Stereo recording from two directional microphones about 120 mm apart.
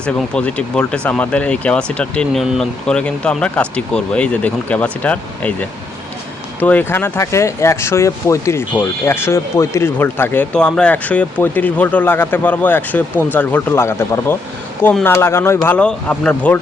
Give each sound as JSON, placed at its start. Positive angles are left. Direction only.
{"t": 0.0, "sound": "speech", "side_deg": 10}
{"t": 6.6, "sound": "speech", "side_deg": 15}
{"t": 10.5, "sound": "speech", "side_deg": 5}